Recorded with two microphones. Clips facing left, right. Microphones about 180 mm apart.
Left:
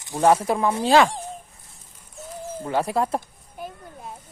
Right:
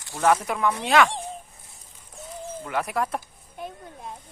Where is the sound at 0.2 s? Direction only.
30° left (ahead or behind).